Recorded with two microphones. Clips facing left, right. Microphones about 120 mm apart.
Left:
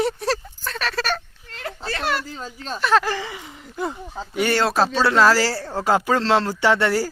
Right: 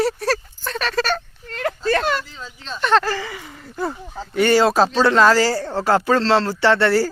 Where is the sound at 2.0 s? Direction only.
5° left (ahead or behind).